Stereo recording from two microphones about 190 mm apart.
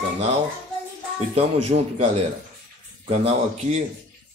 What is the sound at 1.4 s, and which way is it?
Speech, 35° right (ahead or behind).